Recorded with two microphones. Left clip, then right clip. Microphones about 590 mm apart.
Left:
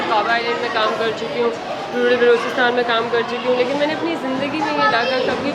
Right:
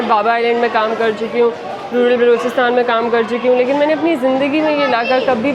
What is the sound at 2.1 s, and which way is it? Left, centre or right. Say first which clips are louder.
A woman's voice: right 1 dB; right.